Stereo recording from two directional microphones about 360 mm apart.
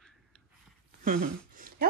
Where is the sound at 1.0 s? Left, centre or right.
Right.